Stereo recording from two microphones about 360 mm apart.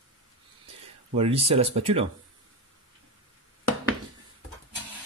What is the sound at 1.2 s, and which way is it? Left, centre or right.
Speech, centre.